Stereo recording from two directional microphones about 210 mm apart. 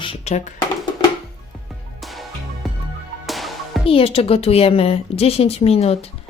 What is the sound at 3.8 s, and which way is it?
A woman's voice, 25° left (ahead or behind).